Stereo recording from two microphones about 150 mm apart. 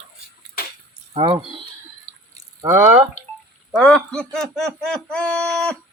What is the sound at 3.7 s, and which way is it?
Speech, 5° left (ahead or behind).